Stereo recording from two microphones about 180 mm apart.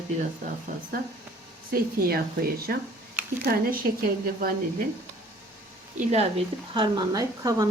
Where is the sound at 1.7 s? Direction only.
55° right (ahead or behind).